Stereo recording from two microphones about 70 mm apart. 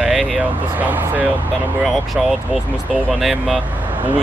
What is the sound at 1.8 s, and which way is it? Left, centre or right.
Speech, centre.